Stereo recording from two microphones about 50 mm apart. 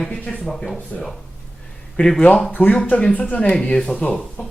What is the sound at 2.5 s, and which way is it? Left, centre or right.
Speech, left.